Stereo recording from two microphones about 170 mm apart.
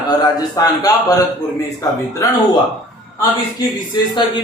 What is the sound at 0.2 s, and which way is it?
A man's voice, 20° left (ahead or behind).